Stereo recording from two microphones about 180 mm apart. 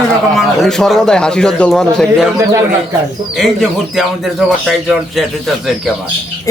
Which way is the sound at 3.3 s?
Centre (ahead or behind).